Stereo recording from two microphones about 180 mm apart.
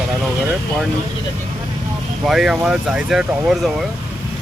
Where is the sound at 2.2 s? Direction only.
Centre (ahead or behind).